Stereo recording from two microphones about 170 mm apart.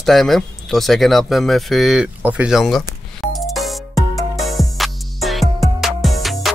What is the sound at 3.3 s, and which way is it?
Music, centre (ahead or behind).